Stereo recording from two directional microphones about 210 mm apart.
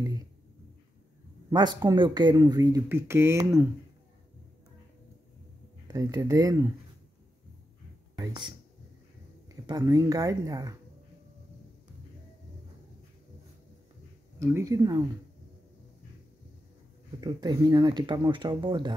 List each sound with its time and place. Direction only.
1.5 s speech: 20° right (ahead or behind)
5.9 s speech: 15° right (ahead or behind)
8.2 s speech: 20° right (ahead or behind)
9.7 s speech: 15° right (ahead or behind)
14.4 s speech: 15° right (ahead or behind)
17.2 s speech: 20° right (ahead or behind)